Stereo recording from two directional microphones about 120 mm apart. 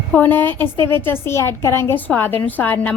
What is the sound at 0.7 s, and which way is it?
Speech, 45° right (ahead or behind).